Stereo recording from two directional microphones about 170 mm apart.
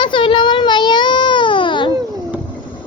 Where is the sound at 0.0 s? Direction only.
30° left (ahead or behind).